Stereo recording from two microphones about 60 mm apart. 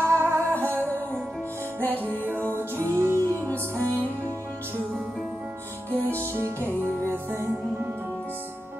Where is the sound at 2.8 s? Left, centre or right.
Right.